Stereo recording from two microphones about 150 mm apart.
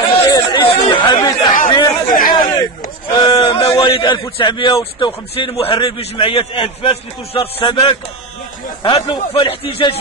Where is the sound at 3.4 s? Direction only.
40° left (ahead or behind).